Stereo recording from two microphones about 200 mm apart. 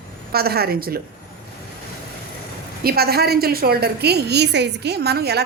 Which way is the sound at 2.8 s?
50° right (ahead or behind).